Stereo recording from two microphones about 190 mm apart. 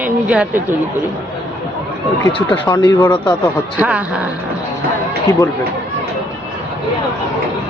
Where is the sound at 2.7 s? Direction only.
20° left (ahead or behind).